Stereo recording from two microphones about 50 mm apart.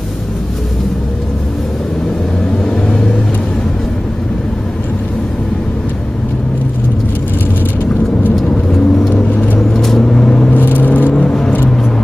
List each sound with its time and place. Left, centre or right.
8.7 s vehicle: centre
9.1 s vehicle: left
9.8 s vehicle: centre
10.5 s car: left
11.1 s vehicle: centre